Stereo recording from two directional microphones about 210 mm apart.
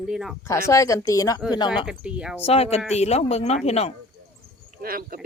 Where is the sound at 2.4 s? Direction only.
30° left (ahead or behind).